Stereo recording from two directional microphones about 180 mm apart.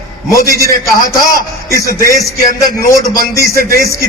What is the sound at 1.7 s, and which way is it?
A man's voice, 15° left (ahead or behind).